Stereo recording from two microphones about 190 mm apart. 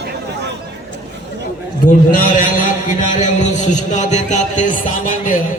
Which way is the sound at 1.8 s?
45° left (ahead or behind).